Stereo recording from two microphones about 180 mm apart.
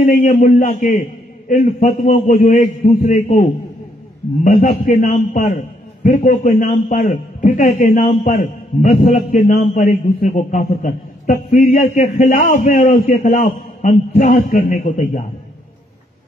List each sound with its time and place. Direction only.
0.0 s a man's voice: 45° left (ahead or behind)
4.5 s a man's voice: 45° left (ahead or behind)
8.3 s a man's voice: 50° left (ahead or behind)